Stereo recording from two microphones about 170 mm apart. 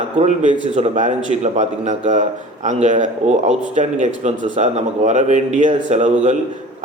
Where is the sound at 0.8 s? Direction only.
45° right (ahead or behind).